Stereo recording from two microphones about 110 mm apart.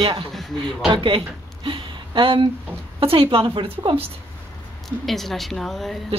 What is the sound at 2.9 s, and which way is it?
A woman's voice, 55° right (ahead or behind).